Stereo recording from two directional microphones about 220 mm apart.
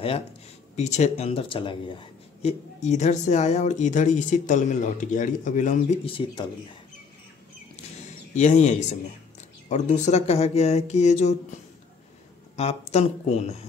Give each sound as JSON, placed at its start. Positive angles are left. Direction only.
{"t": 0.7, "sound": "speech", "side_deg": 30}
{"t": 8.4, "sound": "speech", "side_deg": 35}
{"t": 12.9, "sound": "speech", "side_deg": 30}